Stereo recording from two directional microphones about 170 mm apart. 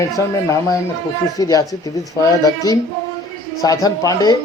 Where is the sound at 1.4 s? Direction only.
20° left (ahead or behind).